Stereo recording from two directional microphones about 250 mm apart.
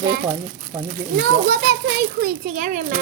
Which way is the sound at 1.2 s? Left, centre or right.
Right.